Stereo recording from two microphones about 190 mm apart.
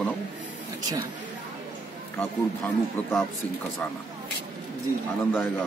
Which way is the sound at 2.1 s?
10° left (ahead or behind).